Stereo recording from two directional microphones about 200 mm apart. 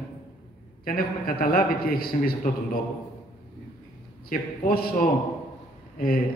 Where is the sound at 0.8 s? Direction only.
45° left (ahead or behind).